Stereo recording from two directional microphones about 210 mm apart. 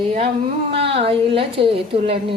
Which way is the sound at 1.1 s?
25° right (ahead or behind).